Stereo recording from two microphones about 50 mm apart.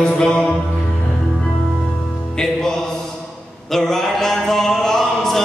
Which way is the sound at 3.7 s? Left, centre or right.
Centre.